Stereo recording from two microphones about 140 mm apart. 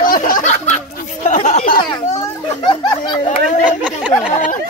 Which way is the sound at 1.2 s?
60° left (ahead or behind).